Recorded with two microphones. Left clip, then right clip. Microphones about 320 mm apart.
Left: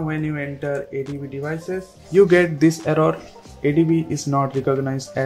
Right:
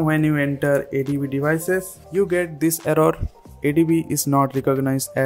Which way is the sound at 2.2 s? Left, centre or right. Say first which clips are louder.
Left 4 dB; centre.